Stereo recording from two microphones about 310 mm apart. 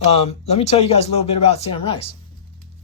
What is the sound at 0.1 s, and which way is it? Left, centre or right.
Speech, centre.